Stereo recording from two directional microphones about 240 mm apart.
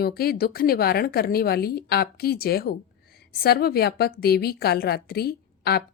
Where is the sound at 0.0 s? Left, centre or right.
Left.